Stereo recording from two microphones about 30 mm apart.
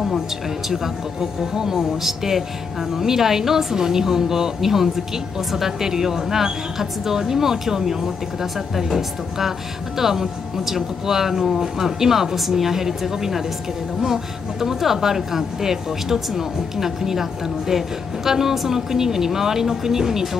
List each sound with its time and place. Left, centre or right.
1.2 s speech: centre